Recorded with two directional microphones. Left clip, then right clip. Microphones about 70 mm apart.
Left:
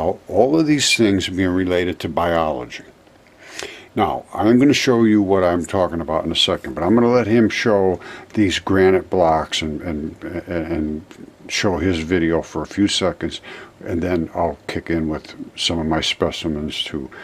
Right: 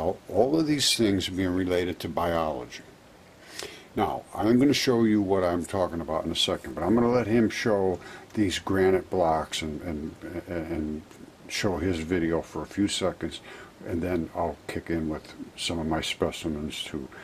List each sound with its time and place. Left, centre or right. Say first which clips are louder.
0.0 s speech: left 8 dB; centre